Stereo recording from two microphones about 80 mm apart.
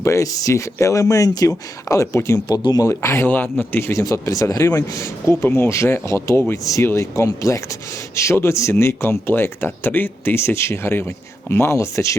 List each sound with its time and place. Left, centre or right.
0.0 s speech: left
1.5 s speech: left
2.5 s speech: left
2.8 s speech: left
3.2 s a man's voice: left
3.8 s speech: left
4.0 s speech: left
4.9 s speech: left